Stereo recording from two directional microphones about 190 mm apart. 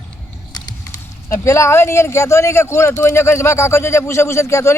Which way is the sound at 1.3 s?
15° left (ahead or behind).